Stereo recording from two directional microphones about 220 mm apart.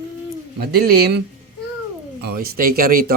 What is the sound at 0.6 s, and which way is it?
Speech, 45° right (ahead or behind).